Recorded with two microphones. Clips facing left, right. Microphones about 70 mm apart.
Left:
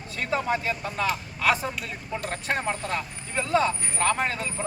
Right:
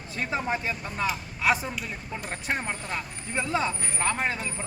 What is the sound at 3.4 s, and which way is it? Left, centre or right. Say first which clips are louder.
Speech: left 4 dB; centre.